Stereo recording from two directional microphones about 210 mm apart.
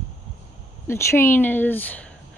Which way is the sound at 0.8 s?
10° left (ahead or behind).